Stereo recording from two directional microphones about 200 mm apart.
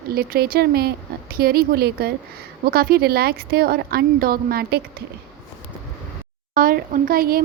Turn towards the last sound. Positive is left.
turn(degrees=-45)  # may be behind; listen again after turning